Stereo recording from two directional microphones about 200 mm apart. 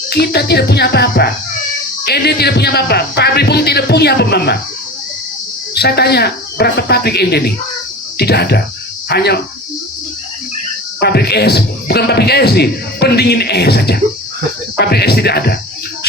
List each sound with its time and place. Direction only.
0.1 s a man's voice: 55° left (ahead or behind)
5.7 s a man's voice: 55° left (ahead or behind)
11.0 s a man's voice: 55° left (ahead or behind)